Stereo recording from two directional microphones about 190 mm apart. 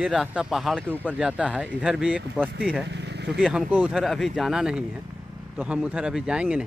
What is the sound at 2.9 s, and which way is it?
Vehicle, 65° right (ahead or behind).